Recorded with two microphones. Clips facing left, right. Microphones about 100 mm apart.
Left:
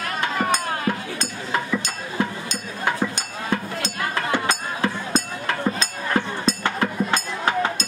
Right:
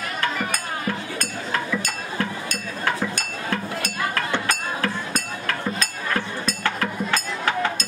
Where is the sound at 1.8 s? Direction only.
20° left (ahead or behind).